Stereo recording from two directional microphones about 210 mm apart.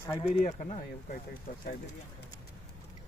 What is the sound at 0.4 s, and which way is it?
Speech, 35° left (ahead or behind).